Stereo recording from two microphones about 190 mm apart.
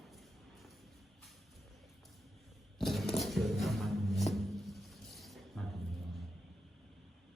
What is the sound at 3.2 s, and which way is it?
Music, centre (ahead or behind).